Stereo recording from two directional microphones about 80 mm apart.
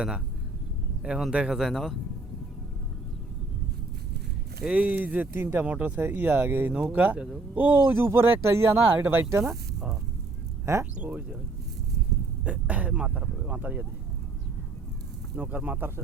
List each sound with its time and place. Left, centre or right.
1.0 s speech: centre
4.6 s speech: centre; by 9.2 s right
10.9 s speech: centre
12.5 s speech: centre
15.4 s speech: centre